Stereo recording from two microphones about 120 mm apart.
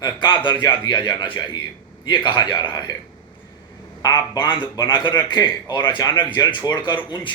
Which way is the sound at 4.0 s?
35° left (ahead or behind).